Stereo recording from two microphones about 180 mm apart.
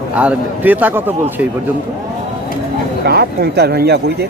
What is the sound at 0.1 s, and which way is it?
A man's voice, 5° right (ahead or behind).